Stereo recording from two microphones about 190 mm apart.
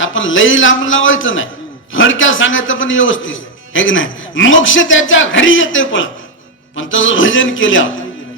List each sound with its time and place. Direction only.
0.0 s a man's voice: 90° left